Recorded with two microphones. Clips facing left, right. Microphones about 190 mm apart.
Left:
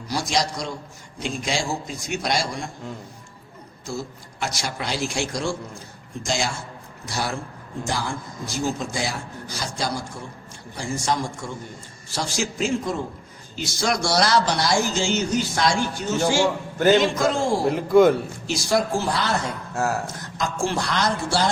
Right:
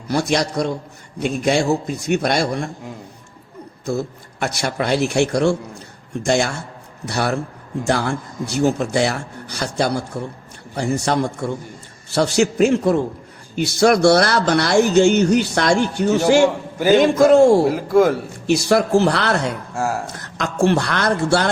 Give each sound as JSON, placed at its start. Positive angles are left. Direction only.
{"t": 0.1, "sound": "speech", "side_deg": -60}
{"t": 3.8, "sound": "speech", "side_deg": -60}
{"t": 16.7, "sound": "a man's voice", "side_deg": -10}
{"t": 17.0, "sound": "speech", "side_deg": -60}
{"t": 17.7, "sound": "a man's voice", "side_deg": -5}
{"t": 18.4, "sound": "speech", "side_deg": -65}
{"t": 19.7, "sound": "speech", "side_deg": -10}
{"t": 20.2, "sound": "speech", "side_deg": -65}